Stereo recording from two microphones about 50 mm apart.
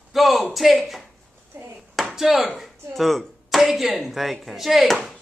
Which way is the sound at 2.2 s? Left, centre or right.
Centre.